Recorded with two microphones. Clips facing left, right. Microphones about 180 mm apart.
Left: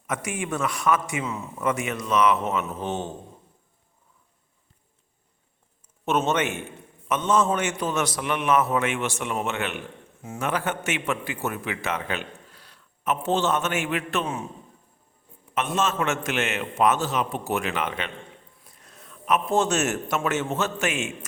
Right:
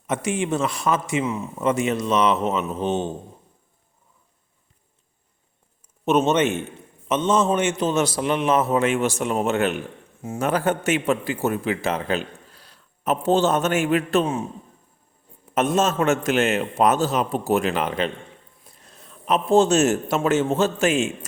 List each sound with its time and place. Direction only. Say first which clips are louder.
0.1 s a man's voice: right 6 dB; 25° right (ahead or behind)
6.1 s a man's voice: right 5 dB; 20° right (ahead or behind)
15.5 s a man's voice: right 5 dB; 40° right (ahead or behind)